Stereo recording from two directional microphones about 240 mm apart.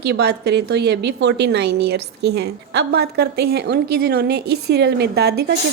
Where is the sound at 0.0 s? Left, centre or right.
Right.